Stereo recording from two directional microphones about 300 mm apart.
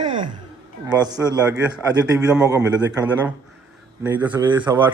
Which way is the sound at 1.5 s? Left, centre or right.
Centre.